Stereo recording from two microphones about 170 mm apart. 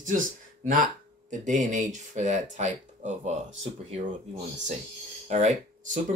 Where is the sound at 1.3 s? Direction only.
45° right (ahead or behind).